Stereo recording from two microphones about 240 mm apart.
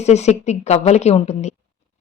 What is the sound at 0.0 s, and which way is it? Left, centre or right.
A woman's voice, left.